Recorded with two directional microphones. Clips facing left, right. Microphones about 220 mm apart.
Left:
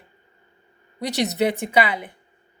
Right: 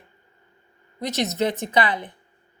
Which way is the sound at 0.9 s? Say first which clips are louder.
Left 2 dB; 15° left (ahead or behind).